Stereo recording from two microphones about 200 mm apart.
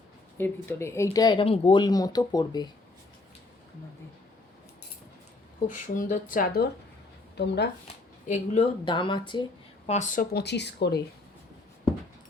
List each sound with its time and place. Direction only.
0.3 s speech: 10° left (ahead or behind)
5.8 s speech: 40° left (ahead or behind); by 7.7 s 55° left (ahead or behind)
8.3 s speech: 30° left (ahead or behind); by 11.0 s 55° left (ahead or behind)